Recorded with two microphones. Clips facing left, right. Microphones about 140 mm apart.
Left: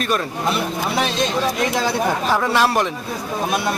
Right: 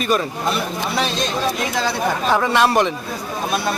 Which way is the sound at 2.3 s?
Centre (ahead or behind).